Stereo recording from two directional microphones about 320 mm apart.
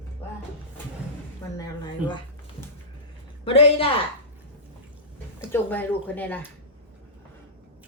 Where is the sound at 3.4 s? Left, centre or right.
Centre.